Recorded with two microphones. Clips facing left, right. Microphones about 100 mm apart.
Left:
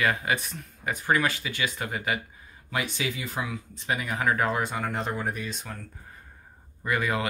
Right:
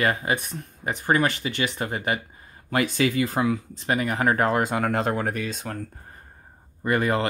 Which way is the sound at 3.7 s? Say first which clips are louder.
Right 5 dB; 60° right (ahead or behind).